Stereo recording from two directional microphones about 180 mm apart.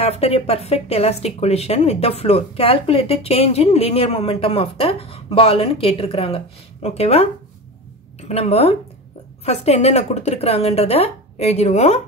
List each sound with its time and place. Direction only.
0.0 s speech: 35° left (ahead or behind)
8.3 s speech: 35° left (ahead or behind)